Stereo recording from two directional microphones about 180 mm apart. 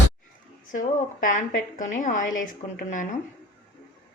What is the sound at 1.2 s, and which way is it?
A woman's voice, 45° left (ahead or behind).